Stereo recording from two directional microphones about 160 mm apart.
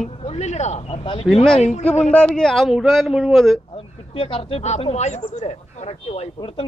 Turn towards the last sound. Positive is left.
turn(degrees=35)  # may be behind; listen again after turning